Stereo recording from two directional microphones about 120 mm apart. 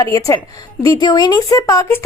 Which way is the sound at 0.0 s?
25° left (ahead or behind).